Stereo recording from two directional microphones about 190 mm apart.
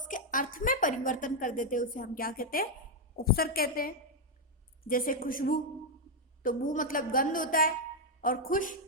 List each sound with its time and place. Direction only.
0.0 s a woman's voice: 45° left (ahead or behind)